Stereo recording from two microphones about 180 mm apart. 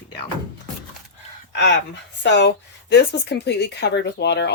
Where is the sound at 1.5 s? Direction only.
70° left (ahead or behind).